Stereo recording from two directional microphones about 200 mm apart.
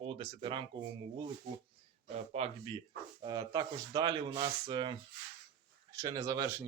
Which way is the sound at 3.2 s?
20° right (ahead or behind).